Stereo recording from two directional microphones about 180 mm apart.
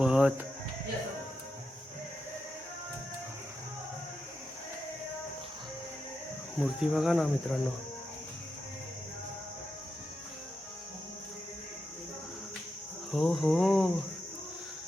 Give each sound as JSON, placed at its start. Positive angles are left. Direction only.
{"t": 0.0, "sound": "speech", "side_deg": -5}
{"t": 6.6, "sound": "cricket", "side_deg": 0}
{"t": 13.1, "sound": "cricket", "side_deg": 0}